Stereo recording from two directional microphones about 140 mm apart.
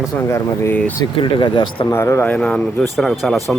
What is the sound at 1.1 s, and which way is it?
Speech, 35° left (ahead or behind).